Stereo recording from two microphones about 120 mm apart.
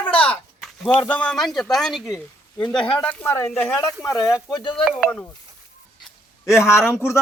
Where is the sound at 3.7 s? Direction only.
30° left (ahead or behind).